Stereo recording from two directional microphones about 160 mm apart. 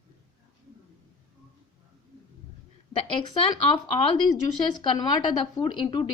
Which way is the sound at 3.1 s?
35° left (ahead or behind).